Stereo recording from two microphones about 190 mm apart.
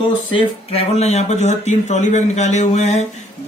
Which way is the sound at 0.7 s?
30° left (ahead or behind).